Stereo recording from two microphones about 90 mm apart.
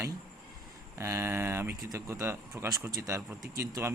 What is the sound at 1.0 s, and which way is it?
A man's voice, 30° right (ahead or behind).